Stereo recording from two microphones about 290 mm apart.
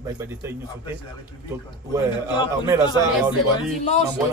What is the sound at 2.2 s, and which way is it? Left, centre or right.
Speech, centre.